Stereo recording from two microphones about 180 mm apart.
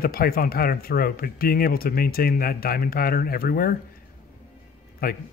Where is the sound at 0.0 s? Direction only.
55° left (ahead or behind).